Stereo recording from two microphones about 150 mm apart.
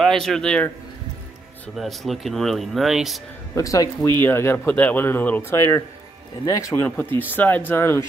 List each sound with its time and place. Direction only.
0.0 s speech: 5° left (ahead or behind)
1.8 s speech: centre (ahead or behind)
3.5 s a man's voice: 25° left (ahead or behind)